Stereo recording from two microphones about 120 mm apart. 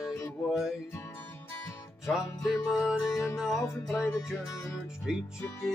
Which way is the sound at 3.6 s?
25° left (ahead or behind).